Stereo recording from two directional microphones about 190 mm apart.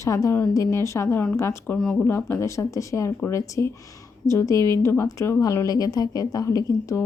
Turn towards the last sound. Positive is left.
turn(degrees=15)  # may be behind; listen again after turning